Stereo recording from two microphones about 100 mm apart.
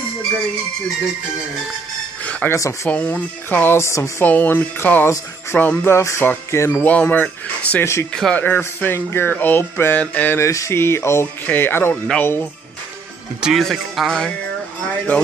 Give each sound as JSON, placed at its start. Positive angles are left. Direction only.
{"t": 2.5, "sound": "speech", "side_deg": 30}
{"t": 2.9, "sound": "speech", "side_deg": 15}
{"t": 4.2, "sound": "speech", "side_deg": 20}
{"t": 6.9, "sound": "speech", "side_deg": 15}
{"t": 8.1, "sound": "speech", "side_deg": 10}
{"t": 13.4, "sound": "speech", "side_deg": 0}